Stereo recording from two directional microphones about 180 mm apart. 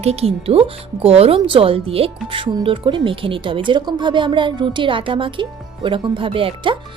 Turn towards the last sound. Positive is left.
turn(degrees=-30)  # may be behind; listen again after turning